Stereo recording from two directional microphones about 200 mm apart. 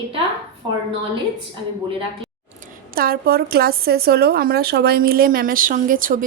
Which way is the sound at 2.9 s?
50° right (ahead or behind).